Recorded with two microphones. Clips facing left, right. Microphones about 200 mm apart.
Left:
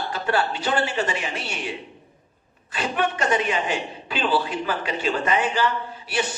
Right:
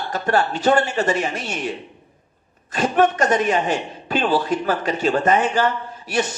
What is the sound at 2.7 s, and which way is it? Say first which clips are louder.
A man's voice: right 7 dB; 45° right (ahead or behind).